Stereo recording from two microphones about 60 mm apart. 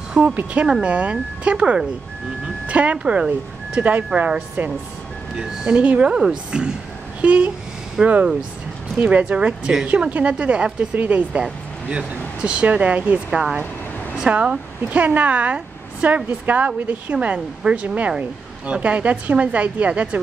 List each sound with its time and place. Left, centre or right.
0.1 s speech: right
3.8 s speech: right
5.3 s speech: centre
7.2 s speech: right
13.3 s a woman's voice: centre